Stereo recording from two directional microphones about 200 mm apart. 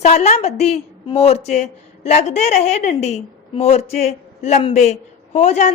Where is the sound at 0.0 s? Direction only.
35° left (ahead or behind).